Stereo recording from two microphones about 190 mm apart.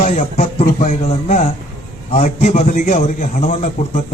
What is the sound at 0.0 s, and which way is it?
Speech, 40° left (ahead or behind).